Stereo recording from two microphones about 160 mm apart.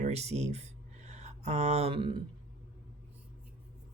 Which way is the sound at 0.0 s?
40° right (ahead or behind).